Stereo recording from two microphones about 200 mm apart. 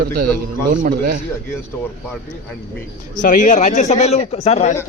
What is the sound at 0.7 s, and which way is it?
Speech, 45° right (ahead or behind).